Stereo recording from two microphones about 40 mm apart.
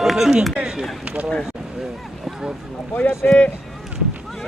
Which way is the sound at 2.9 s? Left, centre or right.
Left.